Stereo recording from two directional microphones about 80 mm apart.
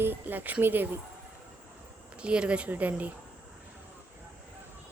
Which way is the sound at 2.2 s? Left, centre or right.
Centre.